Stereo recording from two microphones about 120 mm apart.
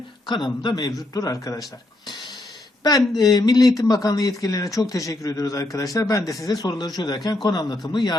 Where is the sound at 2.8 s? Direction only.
35° left (ahead or behind).